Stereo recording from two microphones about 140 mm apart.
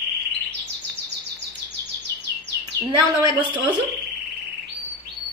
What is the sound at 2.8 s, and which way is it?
Speech, 20° right (ahead or behind).